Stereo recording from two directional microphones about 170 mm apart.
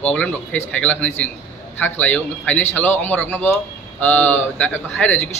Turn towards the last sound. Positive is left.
turn(degrees=10)  # may be behind; listen again after turning